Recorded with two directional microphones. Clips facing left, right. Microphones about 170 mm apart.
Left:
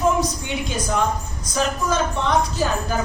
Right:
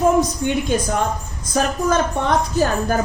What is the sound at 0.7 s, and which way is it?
A woman's voice, 55° right (ahead or behind).